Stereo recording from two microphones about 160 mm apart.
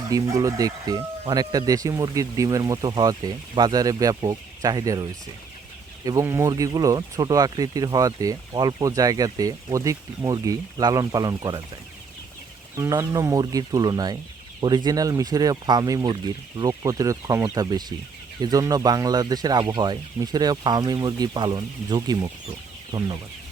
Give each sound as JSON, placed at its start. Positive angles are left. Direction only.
{"t": 0.1, "sound": "speech", "side_deg": -20}
{"t": 6.1, "sound": "speech", "side_deg": -20}
{"t": 12.7, "sound": "speech", "side_deg": -20}